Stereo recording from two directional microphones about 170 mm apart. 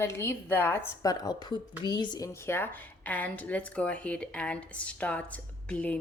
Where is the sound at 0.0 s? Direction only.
15° left (ahead or behind).